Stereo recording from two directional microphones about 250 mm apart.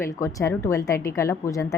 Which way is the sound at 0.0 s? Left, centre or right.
Centre.